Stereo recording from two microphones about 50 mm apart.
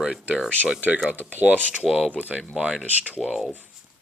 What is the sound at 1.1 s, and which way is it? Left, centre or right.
Mechanisms, right.